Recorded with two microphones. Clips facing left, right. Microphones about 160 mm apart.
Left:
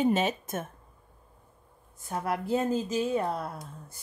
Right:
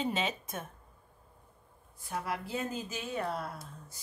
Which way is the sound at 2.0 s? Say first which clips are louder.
Left 5 dB; 45° left (ahead or behind).